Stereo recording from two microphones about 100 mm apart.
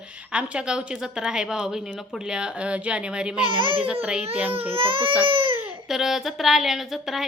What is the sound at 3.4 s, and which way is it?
A child's voice, 60° right (ahead or behind).